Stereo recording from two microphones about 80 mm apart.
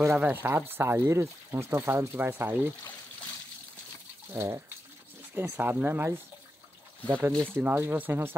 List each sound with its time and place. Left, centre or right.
0.2 s speech: right
4.3 s a sound: right
5.3 s speech: right